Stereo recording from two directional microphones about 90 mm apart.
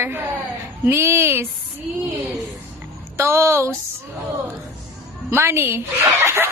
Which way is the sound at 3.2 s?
30° right (ahead or behind).